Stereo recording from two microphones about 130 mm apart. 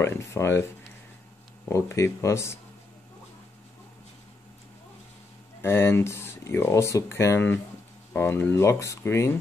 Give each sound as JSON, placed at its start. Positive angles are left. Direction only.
{"t": 0.0, "sound": "speech", "side_deg": 20}
{"t": 1.7, "sound": "speech", "side_deg": 20}
{"t": 5.6, "sound": "speech", "side_deg": 20}